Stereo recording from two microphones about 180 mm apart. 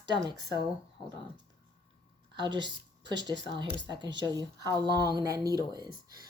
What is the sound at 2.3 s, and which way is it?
A woman's voice, 25° right (ahead or behind).